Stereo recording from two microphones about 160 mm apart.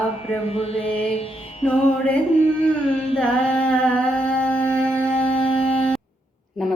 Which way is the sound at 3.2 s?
5° left (ahead or behind).